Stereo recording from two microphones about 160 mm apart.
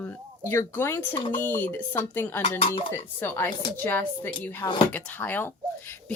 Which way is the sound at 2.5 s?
40° left (ahead or behind).